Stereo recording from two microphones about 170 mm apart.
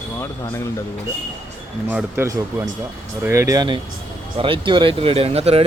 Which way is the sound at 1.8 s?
15° right (ahead or behind).